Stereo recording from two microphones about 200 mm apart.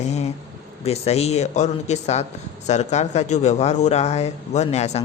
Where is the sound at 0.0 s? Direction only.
35° left (ahead or behind).